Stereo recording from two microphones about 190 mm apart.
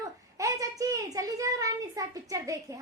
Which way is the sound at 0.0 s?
15° right (ahead or behind).